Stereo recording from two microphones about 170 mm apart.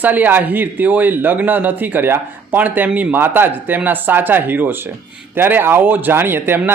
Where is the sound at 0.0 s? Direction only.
10° right (ahead or behind).